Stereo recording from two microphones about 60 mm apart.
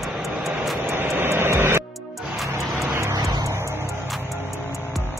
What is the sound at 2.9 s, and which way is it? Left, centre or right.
Vehicle, right.